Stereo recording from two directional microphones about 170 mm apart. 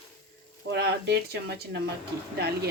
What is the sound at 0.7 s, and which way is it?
Speech, 75° right (ahead or behind).